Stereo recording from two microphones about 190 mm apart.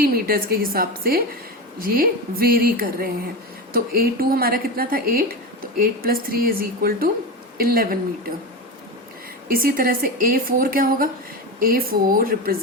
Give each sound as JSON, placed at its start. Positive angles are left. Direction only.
{"t": 0.0, "sound": "a woman's voice", "side_deg": -50}
{"t": 9.5, "sound": "a woman's voice", "side_deg": -50}